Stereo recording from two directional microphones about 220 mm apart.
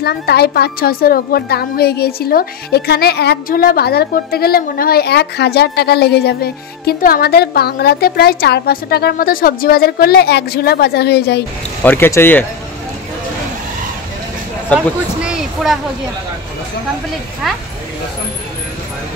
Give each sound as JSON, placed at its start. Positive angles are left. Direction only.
{"t": 0.0, "sound": "a woman's voice", "side_deg": 45}
{"t": 11.8, "sound": "speech", "side_deg": 10}
{"t": 15.2, "sound": "a sound", "side_deg": 0}